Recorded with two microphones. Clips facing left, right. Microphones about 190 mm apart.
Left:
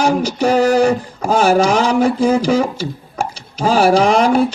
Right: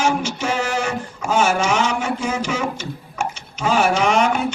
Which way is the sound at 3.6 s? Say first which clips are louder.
Left 6 dB; 35° left (ahead or behind).